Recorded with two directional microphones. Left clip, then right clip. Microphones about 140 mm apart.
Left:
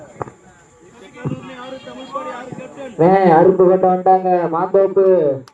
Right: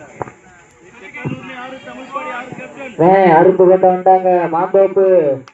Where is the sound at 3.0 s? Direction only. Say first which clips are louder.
Right 2 dB; 50° right (ahead or behind).